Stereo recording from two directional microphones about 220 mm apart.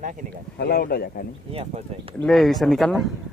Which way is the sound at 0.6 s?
45° left (ahead or behind).